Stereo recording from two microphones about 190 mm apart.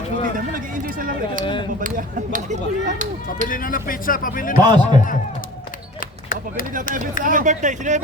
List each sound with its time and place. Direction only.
0.3 s speech: 45° right (ahead or behind)
3.5 s speech: 45° left (ahead or behind)
4.6 s a man's voice: 25° right (ahead or behind)
6.0 s a sound: 45° left (ahead or behind)
6.9 s speech: 45° right (ahead or behind)